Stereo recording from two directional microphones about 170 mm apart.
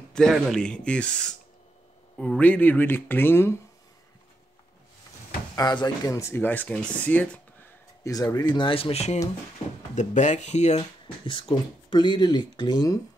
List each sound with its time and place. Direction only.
0.1 s speech: 5° left (ahead or behind)
5.6 s speech: 25° left (ahead or behind); by 7.2 s 5° left (ahead or behind)
8.0 s speech: 20° left (ahead or behind)